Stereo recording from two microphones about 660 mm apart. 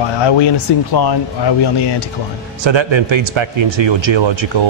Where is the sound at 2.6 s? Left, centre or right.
Right.